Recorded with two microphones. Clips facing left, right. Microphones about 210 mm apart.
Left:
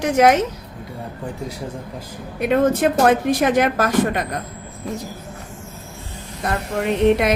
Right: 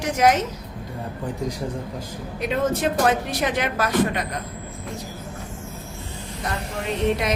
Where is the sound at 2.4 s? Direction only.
55° left (ahead or behind).